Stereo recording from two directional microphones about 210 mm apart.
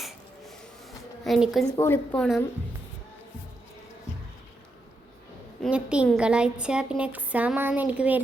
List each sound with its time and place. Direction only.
1.2 s a woman's voice: centre (ahead or behind)
1.7 s a woman's voice: 10° left (ahead or behind)
5.6 s a woman's voice: 5° right (ahead or behind)